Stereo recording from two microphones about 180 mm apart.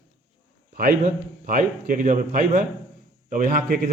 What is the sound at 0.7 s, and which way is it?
A man's voice, 55° right (ahead or behind).